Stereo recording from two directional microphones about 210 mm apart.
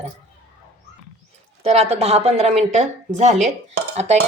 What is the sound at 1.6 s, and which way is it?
Speech, 30° right (ahead or behind).